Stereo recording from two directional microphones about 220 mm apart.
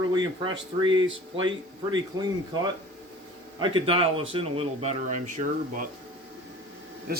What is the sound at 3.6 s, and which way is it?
Speech, 25° right (ahead or behind).